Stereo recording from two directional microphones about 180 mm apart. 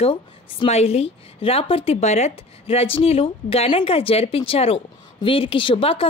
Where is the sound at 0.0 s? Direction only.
30° left (ahead or behind).